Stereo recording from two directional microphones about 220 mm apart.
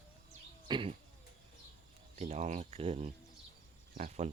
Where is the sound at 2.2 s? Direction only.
30° right (ahead or behind).